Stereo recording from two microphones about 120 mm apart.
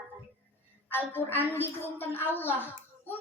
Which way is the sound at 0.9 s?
15° left (ahead or behind).